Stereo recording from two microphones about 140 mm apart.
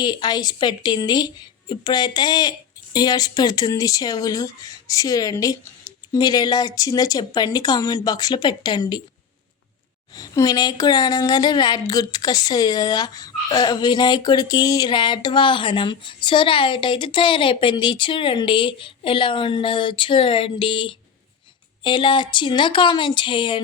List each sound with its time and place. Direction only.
0.0 s speech: 30° left (ahead or behind)
10.2 s speech: 25° left (ahead or behind)